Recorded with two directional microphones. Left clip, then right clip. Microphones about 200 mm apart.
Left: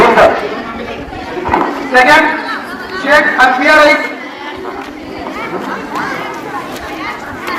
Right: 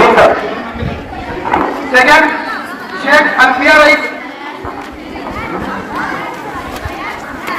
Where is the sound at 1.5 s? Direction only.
15° right (ahead or behind).